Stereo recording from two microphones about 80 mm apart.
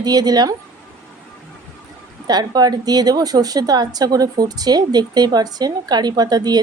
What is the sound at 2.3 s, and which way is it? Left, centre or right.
A woman's voice, right.